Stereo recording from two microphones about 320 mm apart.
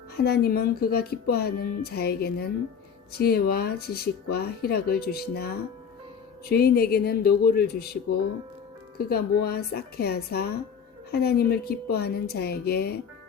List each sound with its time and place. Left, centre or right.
0.2 s speech: left